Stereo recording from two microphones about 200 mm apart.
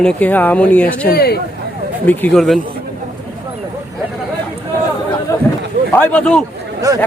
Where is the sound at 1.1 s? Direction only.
50° left (ahead or behind).